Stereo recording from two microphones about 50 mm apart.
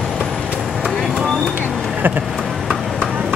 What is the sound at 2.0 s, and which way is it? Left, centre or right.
Vehicle, right.